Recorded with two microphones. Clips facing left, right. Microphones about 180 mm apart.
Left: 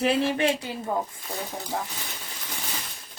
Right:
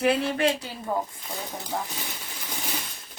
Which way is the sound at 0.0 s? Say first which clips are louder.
Even; 25° left (ahead or behind).